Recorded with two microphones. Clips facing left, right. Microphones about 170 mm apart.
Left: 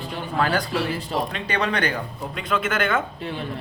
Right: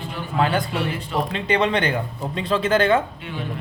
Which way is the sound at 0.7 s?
35° left (ahead or behind).